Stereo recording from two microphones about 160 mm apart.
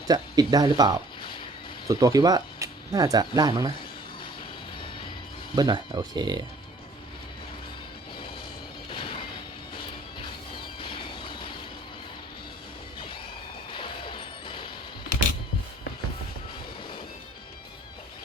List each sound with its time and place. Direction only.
0.1 s speech: 25° right (ahead or behind)
1.2 s music: 30° left (ahead or behind)
1.9 s speech: 20° right (ahead or behind)
5.5 s speech: 25° right (ahead or behind)
8.9 s a sound: 30° left (ahead or behind)
10.8 s vehicle: 35° left (ahead or behind)
13.7 s smash: 30° left (ahead or behind)